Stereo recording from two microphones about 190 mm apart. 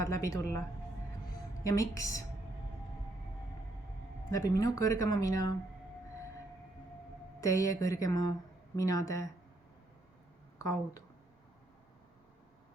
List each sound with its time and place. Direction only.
0.0 s speech: 15° left (ahead or behind)
1.6 s speech: 15° left (ahead or behind)
4.3 s speech: 20° left (ahead or behind)
7.4 s speech: 15° left (ahead or behind)
10.6 s speech: 15° left (ahead or behind)